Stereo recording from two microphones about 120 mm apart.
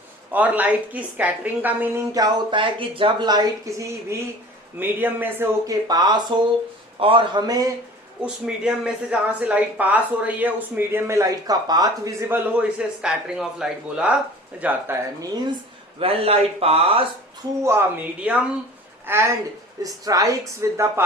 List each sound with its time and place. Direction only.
0.3 s speech: 15° right (ahead or behind)
2.1 s speech: 40° right (ahead or behind); by 5.5 s 15° right (ahead or behind)
5.6 s speech: 35° right (ahead or behind)
8.2 s speech: 5° right (ahead or behind); by 12.1 s 35° right (ahead or behind)
12.3 s speech: 15° right (ahead or behind)
16.0 s a man's voice: 50° right (ahead or behind)
17.6 s speech: 20° right (ahead or behind)
19.0 s a woman's voice: 20° right (ahead or behind)